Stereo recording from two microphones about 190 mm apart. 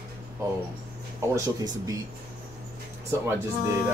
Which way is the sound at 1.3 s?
20° right (ahead or behind).